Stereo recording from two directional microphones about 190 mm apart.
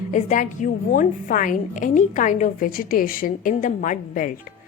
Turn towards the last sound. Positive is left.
turn(degrees=45)  # may be behind; listen again after turning